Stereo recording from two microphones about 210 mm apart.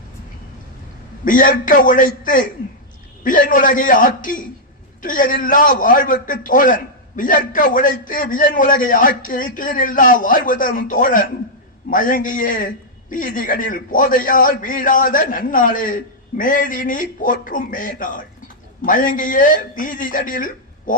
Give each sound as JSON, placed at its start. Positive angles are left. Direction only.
{"t": 1.2, "sound": "a man's voice", "side_deg": 40}